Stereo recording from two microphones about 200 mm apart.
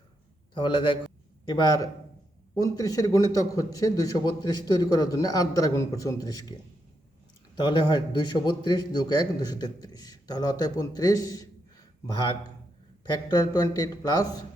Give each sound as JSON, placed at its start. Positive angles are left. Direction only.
{"t": 0.5, "sound": "a man's voice", "side_deg": 25}
{"t": 7.5, "sound": "a man's voice", "side_deg": 20}